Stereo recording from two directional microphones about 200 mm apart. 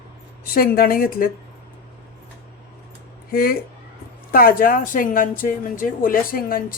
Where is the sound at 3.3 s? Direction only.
50° left (ahead or behind).